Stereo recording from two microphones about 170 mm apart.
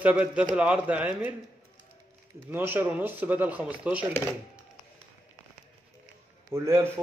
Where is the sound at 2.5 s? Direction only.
10° right (ahead or behind).